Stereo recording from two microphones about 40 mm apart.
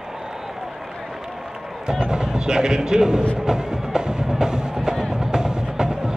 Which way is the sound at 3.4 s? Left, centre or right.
Centre.